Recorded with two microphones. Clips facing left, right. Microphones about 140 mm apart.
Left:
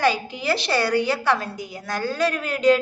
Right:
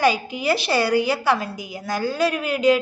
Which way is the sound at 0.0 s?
10° right (ahead or behind).